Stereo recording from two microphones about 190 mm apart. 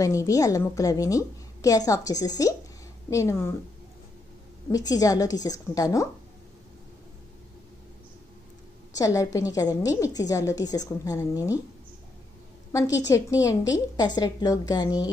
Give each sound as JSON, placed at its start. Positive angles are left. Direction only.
{"t": 0.0, "sound": "a woman's voice", "side_deg": 15}
{"t": 4.6, "sound": "a woman's voice", "side_deg": 20}
{"t": 8.9, "sound": "a woman's voice", "side_deg": 15}
{"t": 12.7, "sound": "a woman's voice", "side_deg": 15}